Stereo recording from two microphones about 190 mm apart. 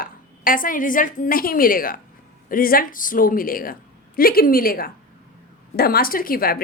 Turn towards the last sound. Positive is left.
turn(degrees=50)  # may be behind; listen again after turning